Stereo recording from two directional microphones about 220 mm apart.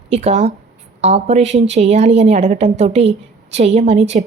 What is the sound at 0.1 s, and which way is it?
A woman's voice, 30° right (ahead or behind).